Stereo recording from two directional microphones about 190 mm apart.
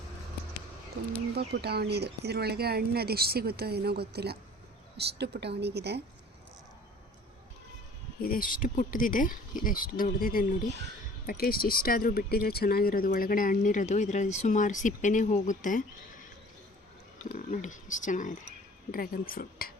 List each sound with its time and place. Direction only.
1.4 s speech: 55° right (ahead or behind)
8.2 s speech: 50° left (ahead or behind)
17.2 s speech: 40° left (ahead or behind)